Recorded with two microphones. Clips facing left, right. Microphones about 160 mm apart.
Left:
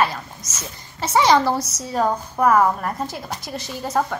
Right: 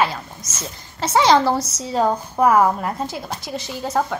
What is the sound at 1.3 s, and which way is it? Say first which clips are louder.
Speech: right 2 dB; centre (ahead or behind).